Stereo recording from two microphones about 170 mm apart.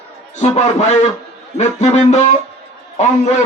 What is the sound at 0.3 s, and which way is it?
A man's voice, 40° left (ahead or behind).